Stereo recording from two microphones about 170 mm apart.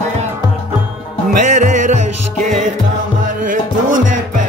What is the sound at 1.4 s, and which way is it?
Music, 45° right (ahead or behind).